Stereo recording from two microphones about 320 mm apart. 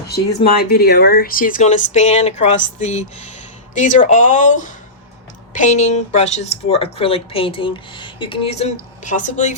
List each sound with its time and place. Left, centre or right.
0.1 s speech: left